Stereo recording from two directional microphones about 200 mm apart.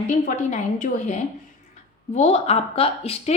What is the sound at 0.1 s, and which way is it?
A woman's voice, 40° left (ahead or behind).